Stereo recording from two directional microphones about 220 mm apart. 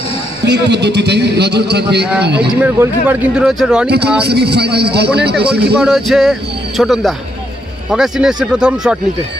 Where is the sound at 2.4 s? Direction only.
10° right (ahead or behind).